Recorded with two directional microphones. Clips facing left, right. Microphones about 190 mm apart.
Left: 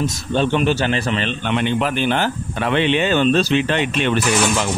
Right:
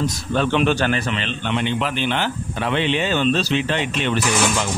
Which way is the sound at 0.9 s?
40° left (ahead or behind).